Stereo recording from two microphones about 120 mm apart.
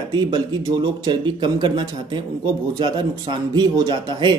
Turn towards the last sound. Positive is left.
turn(degrees=-40)  # may be behind; listen again after turning